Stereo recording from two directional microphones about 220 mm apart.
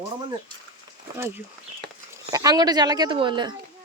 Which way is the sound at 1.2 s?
10° right (ahead or behind).